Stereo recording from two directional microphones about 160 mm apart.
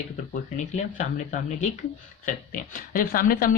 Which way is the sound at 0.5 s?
45° left (ahead or behind).